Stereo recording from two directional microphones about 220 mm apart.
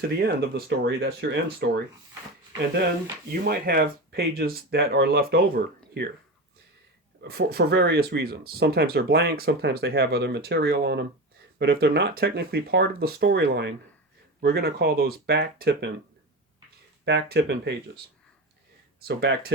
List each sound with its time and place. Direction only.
0.2 s speech: 45° right (ahead or behind)
3.4 s speech: 45° right (ahead or behind)
7.2 s speech: 45° right (ahead or behind)
17.1 s speech: 50° right (ahead or behind)
18.9 s speech: 45° right (ahead or behind)